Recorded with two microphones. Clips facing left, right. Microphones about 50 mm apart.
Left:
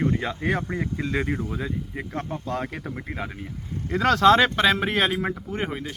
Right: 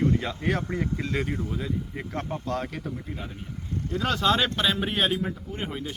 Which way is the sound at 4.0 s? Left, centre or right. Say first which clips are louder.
Left 7 dB; left.